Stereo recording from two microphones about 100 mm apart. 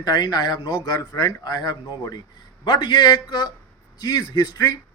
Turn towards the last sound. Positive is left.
turn(degrees=35)  # may be behind; listen again after turning